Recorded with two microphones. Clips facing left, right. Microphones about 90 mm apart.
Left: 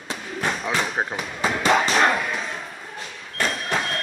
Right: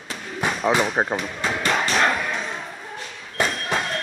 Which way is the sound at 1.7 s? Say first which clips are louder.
Left 3 dB; 5° left (ahead or behind).